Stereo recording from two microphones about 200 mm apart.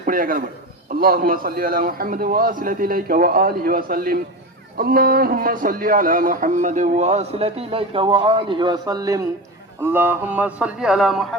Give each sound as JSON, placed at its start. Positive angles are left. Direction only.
{"t": 0.0, "sound": "a man's voice", "side_deg": -45}